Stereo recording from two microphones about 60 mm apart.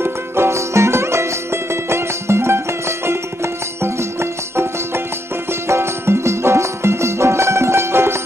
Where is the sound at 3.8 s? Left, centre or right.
Right.